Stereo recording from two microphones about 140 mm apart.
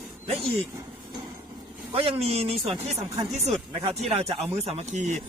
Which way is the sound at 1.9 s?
40° right (ahead or behind).